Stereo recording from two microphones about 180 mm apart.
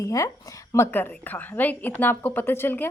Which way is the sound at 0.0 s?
20° left (ahead or behind).